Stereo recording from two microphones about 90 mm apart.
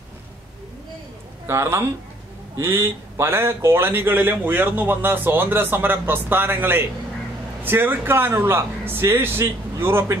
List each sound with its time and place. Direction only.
1.5 s speech: 30° right (ahead or behind)